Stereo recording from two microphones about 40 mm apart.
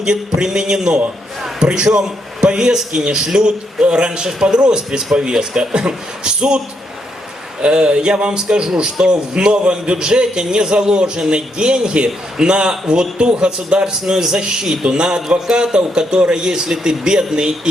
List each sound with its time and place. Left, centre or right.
0.0 s a man's voice: centre
7.6 s a man's voice: right